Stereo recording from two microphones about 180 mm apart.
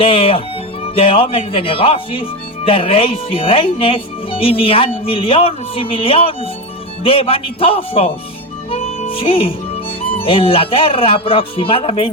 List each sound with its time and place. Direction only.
0.0 s speech: 30° left (ahead or behind)
8.7 s music: 35° left (ahead or behind)
10.2 s speech: 30° left (ahead or behind)